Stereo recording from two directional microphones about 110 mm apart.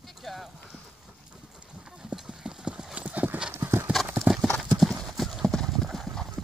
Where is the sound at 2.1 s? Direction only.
10° right (ahead or behind).